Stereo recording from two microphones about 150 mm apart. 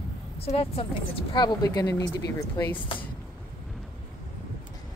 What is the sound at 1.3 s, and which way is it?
Speech, 30° left (ahead or behind).